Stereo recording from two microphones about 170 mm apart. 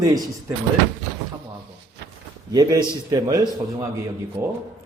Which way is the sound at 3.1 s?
20° right (ahead or behind).